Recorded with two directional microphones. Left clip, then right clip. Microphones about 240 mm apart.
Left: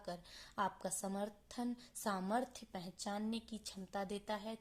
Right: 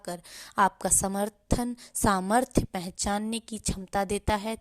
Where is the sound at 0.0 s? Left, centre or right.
Right.